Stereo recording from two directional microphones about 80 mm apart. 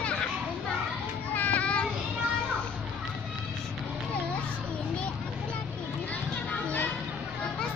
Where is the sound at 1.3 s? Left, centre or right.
Centre.